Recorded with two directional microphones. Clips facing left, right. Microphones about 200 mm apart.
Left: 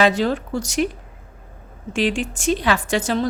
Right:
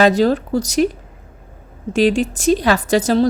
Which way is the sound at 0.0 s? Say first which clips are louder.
Right 5 dB; 40° right (ahead or behind).